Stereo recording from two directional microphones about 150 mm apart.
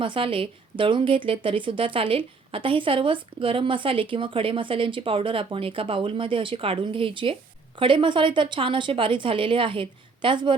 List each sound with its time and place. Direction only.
0.0 s speech: 35° right (ahead or behind)